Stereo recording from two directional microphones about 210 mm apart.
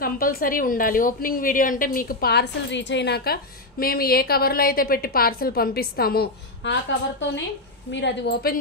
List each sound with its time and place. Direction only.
0.0 s a woman's voice: 45° left (ahead or behind)